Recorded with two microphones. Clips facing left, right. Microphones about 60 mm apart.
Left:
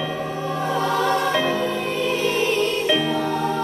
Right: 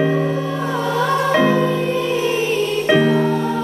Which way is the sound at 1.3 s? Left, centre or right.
Right.